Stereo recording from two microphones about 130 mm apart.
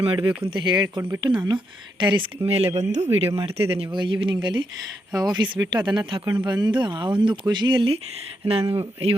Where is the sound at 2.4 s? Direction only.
50° right (ahead or behind).